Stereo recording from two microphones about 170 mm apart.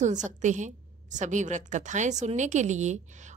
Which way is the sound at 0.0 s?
45° right (ahead or behind).